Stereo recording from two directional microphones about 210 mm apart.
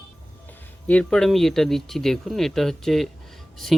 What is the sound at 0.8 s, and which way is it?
Speech, 5° left (ahead or behind).